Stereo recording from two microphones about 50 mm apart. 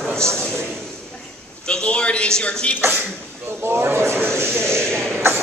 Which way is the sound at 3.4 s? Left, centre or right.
Right.